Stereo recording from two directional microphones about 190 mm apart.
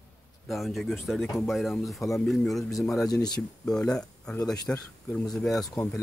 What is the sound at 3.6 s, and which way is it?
Speech, 5° left (ahead or behind).